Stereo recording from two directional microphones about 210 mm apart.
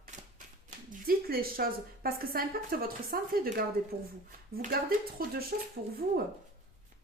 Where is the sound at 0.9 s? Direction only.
45° right (ahead or behind).